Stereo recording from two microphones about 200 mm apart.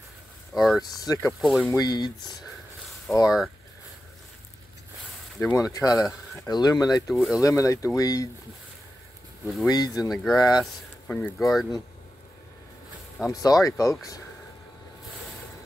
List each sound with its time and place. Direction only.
0.6 s speech: centre (ahead or behind)
0.8 s speech: 20° left (ahead or behind)
1.4 s speech: centre (ahead or behind)
1.7 s speech: 20° left (ahead or behind)
5.4 s speech: 15° left (ahead or behind)
9.7 s speech: 20° left (ahead or behind)
10.6 s speech: 5° left (ahead or behind)
13.3 s speech: 20° left (ahead or behind)